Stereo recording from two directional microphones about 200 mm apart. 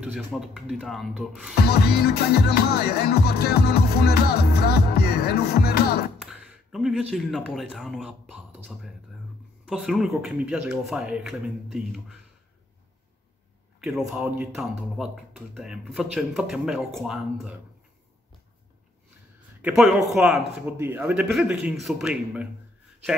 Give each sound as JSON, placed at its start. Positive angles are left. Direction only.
{"t": 0.0, "sound": "speech", "side_deg": 0}
{"t": 1.5, "sound": "music", "side_deg": 50}
{"t": 6.1, "sound": "speech", "side_deg": -5}
{"t": 9.7, "sound": "speech", "side_deg": 0}
{"t": 13.7, "sound": "a sound", "side_deg": 0}
{"t": 14.2, "sound": "speech", "side_deg": -5}
{"t": 19.6, "sound": "speech", "side_deg": 0}